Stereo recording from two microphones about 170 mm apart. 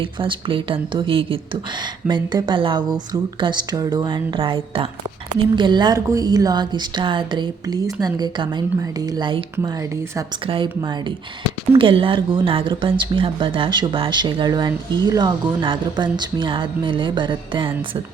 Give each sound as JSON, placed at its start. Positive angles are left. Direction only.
{"t": 0.0, "sound": "speech", "side_deg": -30}